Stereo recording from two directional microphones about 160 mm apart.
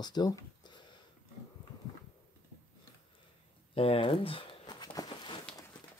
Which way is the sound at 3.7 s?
35° left (ahead or behind).